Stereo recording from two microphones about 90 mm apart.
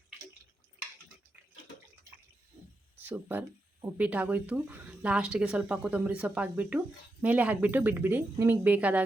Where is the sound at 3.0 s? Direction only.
20° right (ahead or behind).